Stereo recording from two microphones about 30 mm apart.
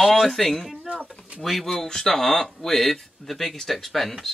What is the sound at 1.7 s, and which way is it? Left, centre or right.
Speech, centre.